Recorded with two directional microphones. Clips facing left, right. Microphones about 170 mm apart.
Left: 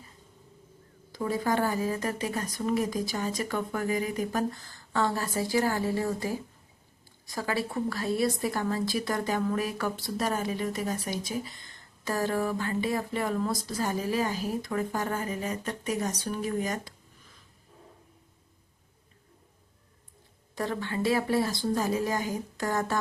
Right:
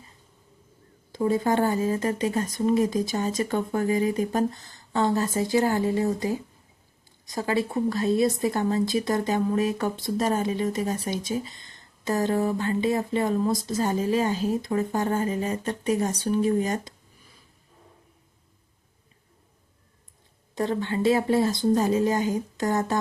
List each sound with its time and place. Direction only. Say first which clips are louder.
1.1 s a woman's voice: right 5 dB; 25° right (ahead or behind)
20.6 s a woman's voice: right 5 dB; 25° right (ahead or behind)